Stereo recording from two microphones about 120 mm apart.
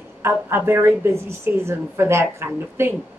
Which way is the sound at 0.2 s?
20° right (ahead or behind).